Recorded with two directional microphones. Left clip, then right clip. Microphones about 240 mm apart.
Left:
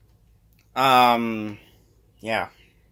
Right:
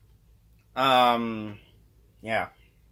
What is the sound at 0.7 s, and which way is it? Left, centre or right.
Keys jangling, left.